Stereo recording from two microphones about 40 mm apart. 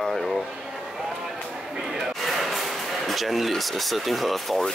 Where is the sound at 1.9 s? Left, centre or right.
Centre.